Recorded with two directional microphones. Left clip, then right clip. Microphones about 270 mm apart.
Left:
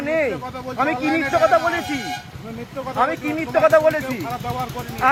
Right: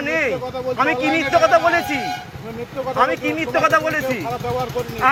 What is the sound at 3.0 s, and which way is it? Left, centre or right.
Speech, centre.